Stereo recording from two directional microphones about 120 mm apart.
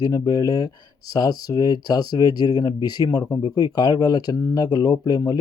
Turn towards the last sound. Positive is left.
turn(degrees=35)  # may be behind; listen again after turning